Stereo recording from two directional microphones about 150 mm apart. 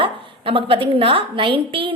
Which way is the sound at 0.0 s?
35° right (ahead or behind).